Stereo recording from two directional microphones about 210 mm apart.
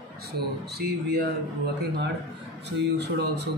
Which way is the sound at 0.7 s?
50° right (ahead or behind).